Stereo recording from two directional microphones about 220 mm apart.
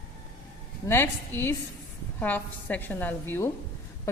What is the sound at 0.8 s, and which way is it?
A woman's voice, 10° left (ahead or behind).